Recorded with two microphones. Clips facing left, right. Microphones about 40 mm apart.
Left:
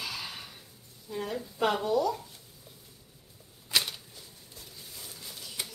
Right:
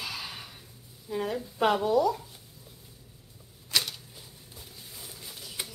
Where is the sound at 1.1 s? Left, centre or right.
Centre.